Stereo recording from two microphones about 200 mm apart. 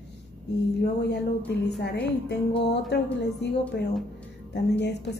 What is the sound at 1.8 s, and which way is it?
A woman's voice, 55° left (ahead or behind).